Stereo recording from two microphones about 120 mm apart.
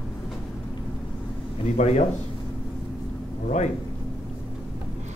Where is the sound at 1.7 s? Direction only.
70° left (ahead or behind).